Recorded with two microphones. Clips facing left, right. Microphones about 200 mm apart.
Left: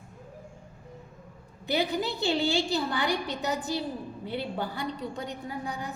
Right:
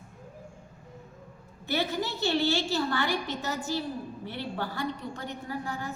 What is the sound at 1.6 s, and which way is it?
A woman's voice, 15° left (ahead or behind).